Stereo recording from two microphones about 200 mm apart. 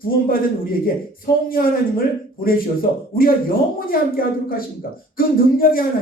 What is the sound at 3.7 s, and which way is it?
Speech, 45° left (ahead or behind).